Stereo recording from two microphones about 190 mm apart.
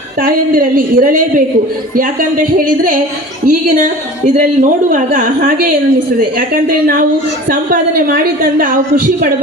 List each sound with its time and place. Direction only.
0.2 s a woman's voice: 50° right (ahead or behind)
2.6 s a woman's voice: 45° right (ahead or behind)
4.9 s a woman's voice: 45° right (ahead or behind)